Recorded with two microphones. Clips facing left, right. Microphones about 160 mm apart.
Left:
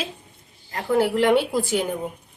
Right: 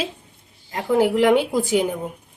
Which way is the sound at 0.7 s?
15° right (ahead or behind).